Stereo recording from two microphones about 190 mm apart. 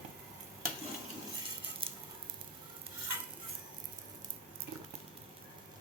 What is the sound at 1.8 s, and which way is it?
Sizzle, 30° right (ahead or behind).